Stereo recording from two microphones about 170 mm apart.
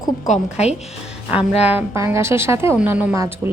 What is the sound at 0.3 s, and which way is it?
Speech, 40° left (ahead or behind).